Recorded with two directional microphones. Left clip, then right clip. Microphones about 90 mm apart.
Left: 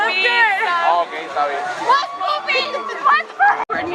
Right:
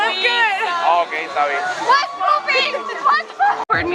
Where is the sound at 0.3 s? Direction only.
5° right (ahead or behind).